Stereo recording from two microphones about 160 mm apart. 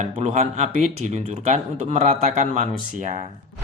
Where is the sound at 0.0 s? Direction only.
45° right (ahead or behind).